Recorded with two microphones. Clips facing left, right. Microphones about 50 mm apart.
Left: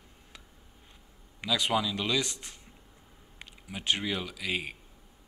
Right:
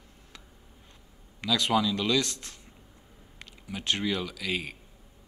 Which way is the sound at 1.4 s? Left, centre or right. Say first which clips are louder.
Right 3 dB; centre.